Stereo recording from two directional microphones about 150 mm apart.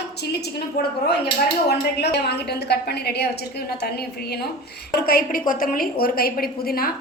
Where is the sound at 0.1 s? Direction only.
90° left.